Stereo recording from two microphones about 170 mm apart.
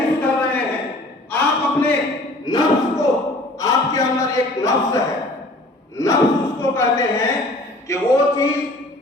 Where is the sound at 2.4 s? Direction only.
20° left (ahead or behind).